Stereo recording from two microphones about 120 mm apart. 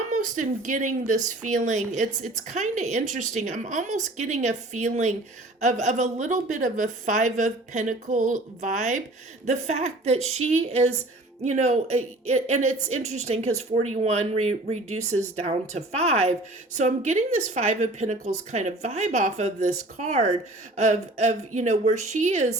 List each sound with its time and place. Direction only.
0.1 s a woman's voice: 90° right
9.5 s speech: 65° right (ahead or behind)
11.4 s speech: 75° right (ahead or behind)
16.7 s speech: 75° right (ahead or behind)